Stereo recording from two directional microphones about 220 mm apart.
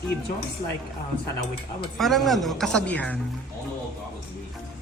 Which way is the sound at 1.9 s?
Centre (ahead or behind).